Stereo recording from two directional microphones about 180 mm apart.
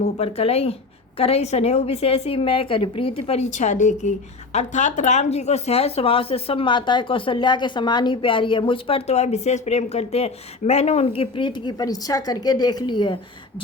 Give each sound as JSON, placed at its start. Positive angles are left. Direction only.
{"t": 0.0, "sound": "a woman's voice", "side_deg": 35}